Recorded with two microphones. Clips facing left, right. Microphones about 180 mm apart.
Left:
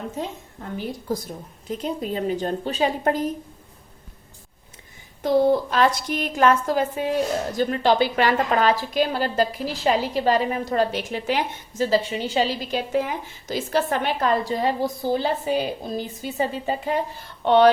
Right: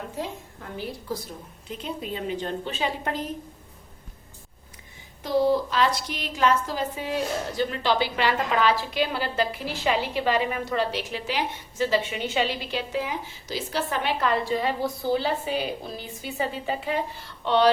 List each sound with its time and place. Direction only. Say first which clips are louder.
1.8 s a woman's voice: left 5 dB; 40° left (ahead or behind)
5.2 s a woman's voice: left 4 dB; 50° left (ahead or behind)